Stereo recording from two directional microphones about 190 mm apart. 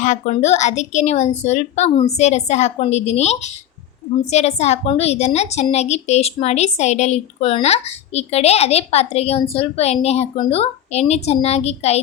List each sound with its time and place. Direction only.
0.0 s a woman's voice: 40° left (ahead or behind)